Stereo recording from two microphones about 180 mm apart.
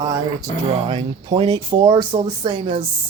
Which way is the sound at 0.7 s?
35° right (ahead or behind).